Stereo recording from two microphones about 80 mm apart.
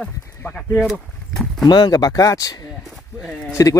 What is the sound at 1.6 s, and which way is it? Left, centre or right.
Speech, left.